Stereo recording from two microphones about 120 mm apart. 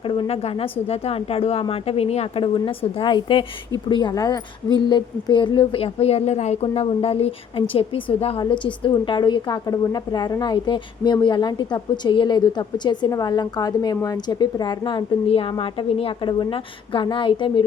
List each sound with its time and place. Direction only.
0.0 s a woman's voice: 45° left (ahead or behind)
15.3 s speech: 50° left (ahead or behind)